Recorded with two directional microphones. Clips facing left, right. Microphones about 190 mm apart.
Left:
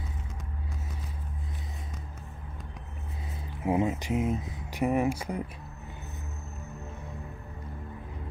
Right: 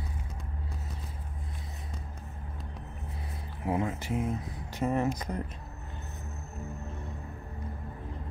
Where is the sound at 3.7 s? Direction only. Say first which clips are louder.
Left 4 dB; 20° left (ahead or behind).